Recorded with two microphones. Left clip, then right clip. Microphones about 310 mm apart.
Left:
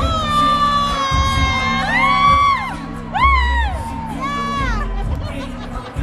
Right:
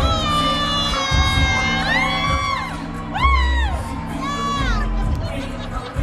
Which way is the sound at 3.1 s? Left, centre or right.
Left.